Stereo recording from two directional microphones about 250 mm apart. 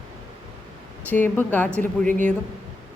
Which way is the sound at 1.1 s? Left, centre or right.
Centre.